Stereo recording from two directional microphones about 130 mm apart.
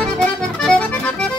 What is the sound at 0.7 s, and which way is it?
Accordion, 10° left (ahead or behind).